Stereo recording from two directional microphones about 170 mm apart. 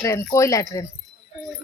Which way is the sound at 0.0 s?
15° left (ahead or behind).